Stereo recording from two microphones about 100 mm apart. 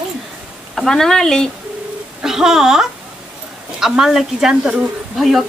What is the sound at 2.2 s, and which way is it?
Speech, 5° right (ahead or behind).